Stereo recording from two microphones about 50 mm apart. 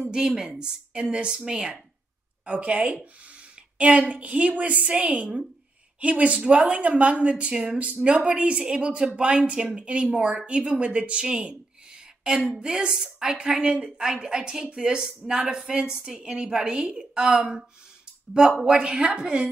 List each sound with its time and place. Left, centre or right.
0.0 s a woman's voice: centre
2.4 s speech: right
7.5 s a woman's voice: centre
7.8 s a woman's voice: right